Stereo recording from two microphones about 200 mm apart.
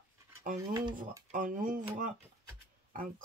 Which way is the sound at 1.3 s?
45° right (ahead or behind).